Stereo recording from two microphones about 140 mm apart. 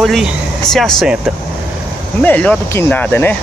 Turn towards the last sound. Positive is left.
turn(degrees=15)  # may be behind; listen again after turning